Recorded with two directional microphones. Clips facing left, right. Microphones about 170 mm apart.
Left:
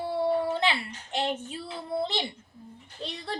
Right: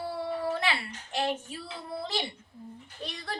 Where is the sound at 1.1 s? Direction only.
25° left (ahead or behind).